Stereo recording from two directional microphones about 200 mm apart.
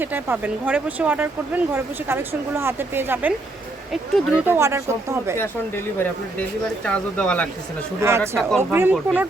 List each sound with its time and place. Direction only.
0.0 s speech: 10° right (ahead or behind)
4.4 s speech: 10° right (ahead or behind)
5.4 s speech: 10° left (ahead or behind)
8.0 s speech: 15° right (ahead or behind)
8.4 s speech: centre (ahead or behind)
8.7 s speech: 10° right (ahead or behind)